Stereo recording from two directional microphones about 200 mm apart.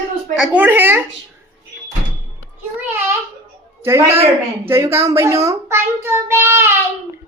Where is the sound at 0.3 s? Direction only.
5° right (ahead or behind).